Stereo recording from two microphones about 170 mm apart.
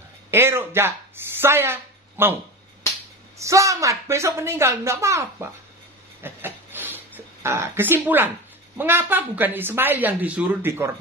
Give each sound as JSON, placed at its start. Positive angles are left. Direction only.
{"t": 0.3, "sound": "speech", "side_deg": -15}
{"t": 3.3, "sound": "speech", "side_deg": -20}
{"t": 6.2, "sound": "a sound", "side_deg": -10}
{"t": 7.4, "sound": "speech", "side_deg": -15}